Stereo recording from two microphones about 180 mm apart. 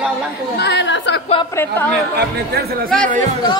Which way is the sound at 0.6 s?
80° left.